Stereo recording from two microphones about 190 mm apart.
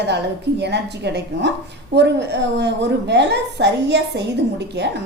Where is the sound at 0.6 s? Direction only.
65° right (ahead or behind).